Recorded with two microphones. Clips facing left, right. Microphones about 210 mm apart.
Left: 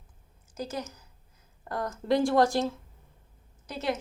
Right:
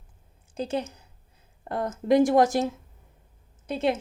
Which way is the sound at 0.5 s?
30° right (ahead or behind).